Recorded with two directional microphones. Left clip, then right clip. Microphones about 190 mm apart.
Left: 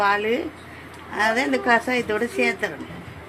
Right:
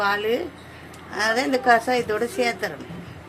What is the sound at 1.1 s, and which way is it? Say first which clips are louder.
A woman's voice: left 1 dB; 5° right (ahead or behind).